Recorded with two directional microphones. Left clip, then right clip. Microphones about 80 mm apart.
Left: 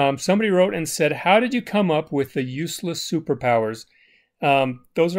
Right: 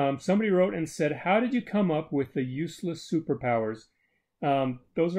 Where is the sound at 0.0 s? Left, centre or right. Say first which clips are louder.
Left 7 dB; left.